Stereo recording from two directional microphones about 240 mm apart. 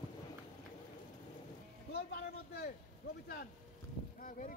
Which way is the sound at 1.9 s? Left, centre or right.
Left.